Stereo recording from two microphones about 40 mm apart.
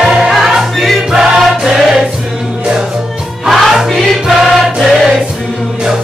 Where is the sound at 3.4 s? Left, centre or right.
Centre.